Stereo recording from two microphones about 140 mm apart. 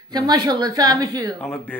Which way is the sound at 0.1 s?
30° right (ahead or behind).